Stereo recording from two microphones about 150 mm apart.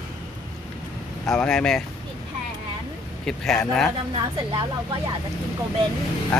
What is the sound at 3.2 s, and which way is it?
Speech, 5° left (ahead or behind).